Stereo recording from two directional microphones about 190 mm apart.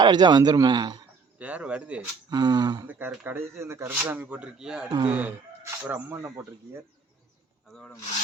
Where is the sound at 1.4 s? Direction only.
5° right (ahead or behind).